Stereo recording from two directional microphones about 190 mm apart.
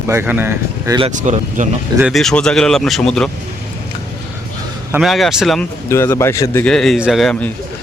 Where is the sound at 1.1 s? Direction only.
40° right (ahead or behind).